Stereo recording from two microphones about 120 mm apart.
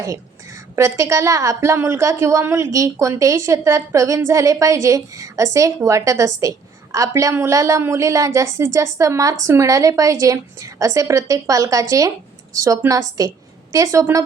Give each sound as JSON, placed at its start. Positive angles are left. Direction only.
{"t": 0.0, "sound": "a woman's voice", "side_deg": -25}